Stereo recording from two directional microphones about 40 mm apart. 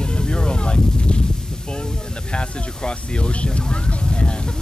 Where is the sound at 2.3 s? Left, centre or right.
Left.